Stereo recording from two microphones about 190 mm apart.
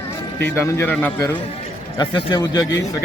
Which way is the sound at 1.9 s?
25° left (ahead or behind).